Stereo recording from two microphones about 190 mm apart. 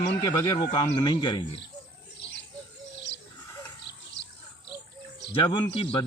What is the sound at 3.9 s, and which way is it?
Bird, 65° left (ahead or behind).